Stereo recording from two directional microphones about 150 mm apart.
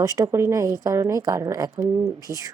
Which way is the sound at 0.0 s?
20° right (ahead or behind).